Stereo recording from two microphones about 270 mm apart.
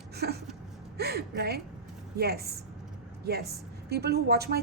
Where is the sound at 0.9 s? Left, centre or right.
Right.